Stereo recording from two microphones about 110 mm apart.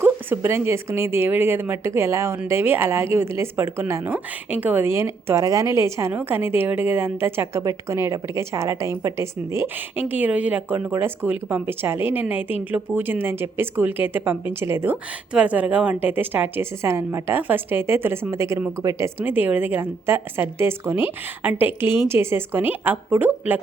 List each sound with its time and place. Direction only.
0.0 s speech: 20° right (ahead or behind)